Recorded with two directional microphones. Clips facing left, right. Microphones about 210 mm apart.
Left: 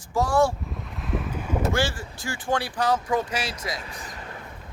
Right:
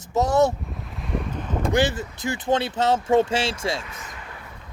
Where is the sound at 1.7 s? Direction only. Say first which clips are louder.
Right 5 dB; 20° right (ahead or behind).